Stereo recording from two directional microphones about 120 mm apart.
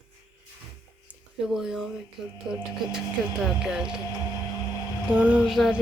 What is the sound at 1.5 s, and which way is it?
Speech, 5° right (ahead or behind).